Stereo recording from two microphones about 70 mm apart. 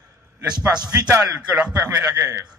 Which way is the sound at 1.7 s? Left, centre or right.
Right.